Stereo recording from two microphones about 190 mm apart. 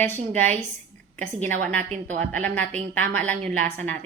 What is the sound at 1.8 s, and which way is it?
Speech, 40° right (ahead or behind).